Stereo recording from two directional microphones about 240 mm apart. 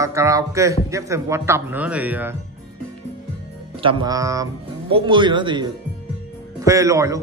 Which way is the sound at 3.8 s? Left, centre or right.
Right.